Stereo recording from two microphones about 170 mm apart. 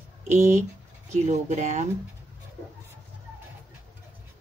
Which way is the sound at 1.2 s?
45° right (ahead or behind).